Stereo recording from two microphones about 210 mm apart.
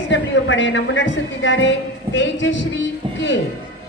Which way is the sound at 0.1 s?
60° left (ahead or behind).